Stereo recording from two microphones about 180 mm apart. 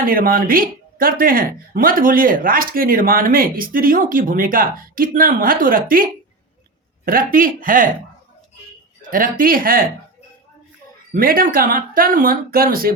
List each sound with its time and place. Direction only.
0.0 s speech: 55° right (ahead or behind)
9.0 s speech: 50° right (ahead or behind)
11.1 s speech: 55° right (ahead or behind)